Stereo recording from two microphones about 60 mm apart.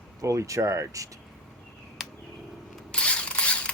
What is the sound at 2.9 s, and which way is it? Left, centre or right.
Mechanisms, centre.